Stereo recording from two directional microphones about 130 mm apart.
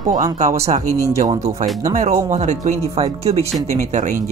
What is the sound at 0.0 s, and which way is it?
Speech, 30° right (ahead or behind).